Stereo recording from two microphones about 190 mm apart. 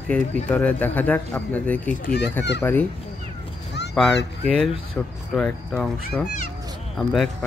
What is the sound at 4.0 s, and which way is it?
Speech, 5° left (ahead or behind).